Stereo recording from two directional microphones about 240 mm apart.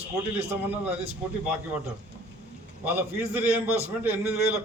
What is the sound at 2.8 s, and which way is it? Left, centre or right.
A man's voice, centre.